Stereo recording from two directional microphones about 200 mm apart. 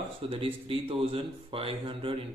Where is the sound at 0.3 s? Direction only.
25° right (ahead or behind).